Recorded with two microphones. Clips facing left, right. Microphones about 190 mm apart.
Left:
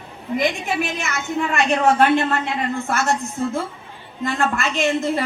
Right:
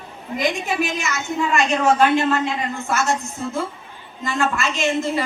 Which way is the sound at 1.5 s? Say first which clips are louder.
Left 1 dB; 60° left (ahead or behind).